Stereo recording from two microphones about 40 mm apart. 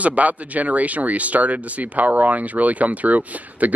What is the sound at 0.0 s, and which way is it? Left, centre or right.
Speech, right.